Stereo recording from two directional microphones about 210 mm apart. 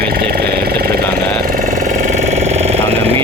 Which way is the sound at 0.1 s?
50° right (ahead or behind).